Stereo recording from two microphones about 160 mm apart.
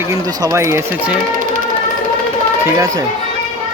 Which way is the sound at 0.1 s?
15° right (ahead or behind).